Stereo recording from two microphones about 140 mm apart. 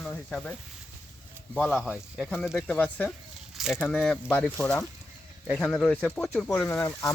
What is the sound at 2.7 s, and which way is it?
Speech, 10° left (ahead or behind).